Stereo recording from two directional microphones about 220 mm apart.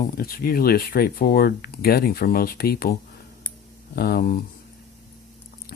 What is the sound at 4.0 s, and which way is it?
Speech, 45° left (ahead or behind).